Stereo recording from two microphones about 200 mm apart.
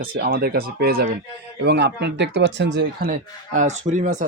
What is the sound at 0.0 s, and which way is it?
Speech, 45° right (ahead or behind).